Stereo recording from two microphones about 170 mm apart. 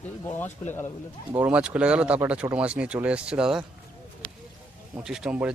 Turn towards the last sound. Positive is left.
turn(degrees=-5)  # may be behind; listen again after turning